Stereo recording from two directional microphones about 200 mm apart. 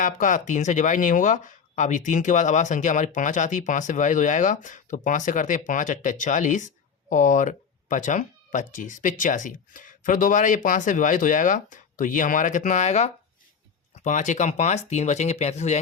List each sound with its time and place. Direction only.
0.0 s speech: 40° left (ahead or behind)